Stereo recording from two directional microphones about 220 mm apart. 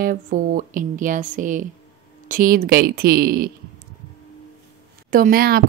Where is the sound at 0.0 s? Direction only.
40° right (ahead or behind).